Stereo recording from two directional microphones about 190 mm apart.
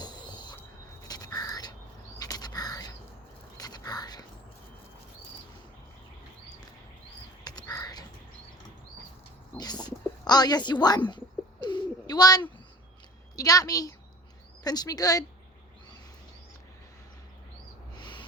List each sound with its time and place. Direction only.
0.0 s a sound: 20° left (ahead or behind)
1.0 s crow: 20° left (ahead or behind)
2.1 s bird: 20° left (ahead or behind)
3.6 s whispering: 20° left (ahead or behind)
7.4 s a sound: 20° left (ahead or behind)
9.6 s bird: 20° left (ahead or behind)
13.3 s a woman's voice: 20° left (ahead or behind)
17.9 s owl: 25° left (ahead or behind)